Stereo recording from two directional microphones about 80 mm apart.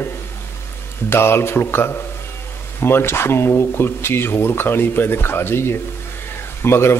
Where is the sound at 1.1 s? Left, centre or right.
Left.